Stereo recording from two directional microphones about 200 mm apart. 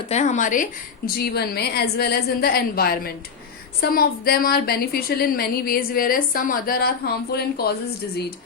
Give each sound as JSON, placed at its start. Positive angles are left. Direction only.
{"t": 0.1, "sound": "a woman's voice", "side_deg": 35}